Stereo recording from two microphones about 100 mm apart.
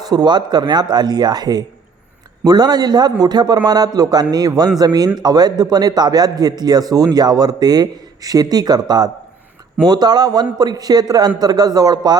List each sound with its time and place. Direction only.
0.1 s a man's voice: 45° right (ahead or behind)